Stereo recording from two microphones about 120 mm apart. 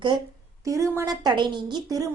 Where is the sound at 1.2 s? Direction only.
40° right (ahead or behind).